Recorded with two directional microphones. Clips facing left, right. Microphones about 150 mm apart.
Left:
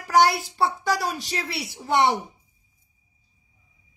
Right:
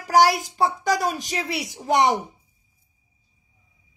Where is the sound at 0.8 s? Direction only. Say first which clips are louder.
Right 3 dB; 45° right (ahead or behind).